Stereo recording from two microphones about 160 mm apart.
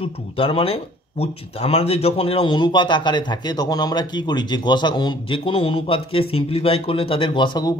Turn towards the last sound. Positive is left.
turn(degrees=25)  # may be behind; listen again after turning